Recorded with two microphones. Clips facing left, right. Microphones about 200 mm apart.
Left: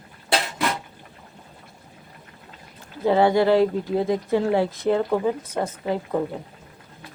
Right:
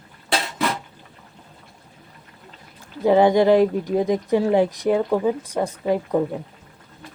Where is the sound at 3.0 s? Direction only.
15° right (ahead or behind).